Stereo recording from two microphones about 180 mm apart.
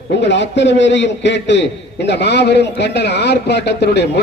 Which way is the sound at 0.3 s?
80° left.